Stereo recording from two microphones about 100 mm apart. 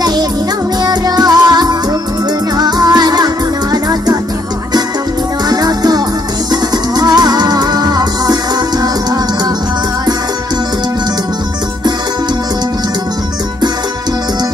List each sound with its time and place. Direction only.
0.0 s music: 40° right (ahead or behind)
5.5 s music: 40° right (ahead or behind)